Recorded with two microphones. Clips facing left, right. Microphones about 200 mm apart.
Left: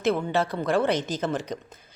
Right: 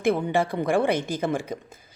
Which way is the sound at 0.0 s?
15° right (ahead or behind).